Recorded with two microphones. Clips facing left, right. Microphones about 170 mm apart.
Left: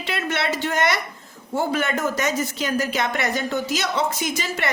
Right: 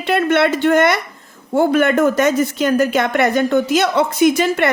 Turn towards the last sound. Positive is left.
turn(degrees=-55)  # may be behind; listen again after turning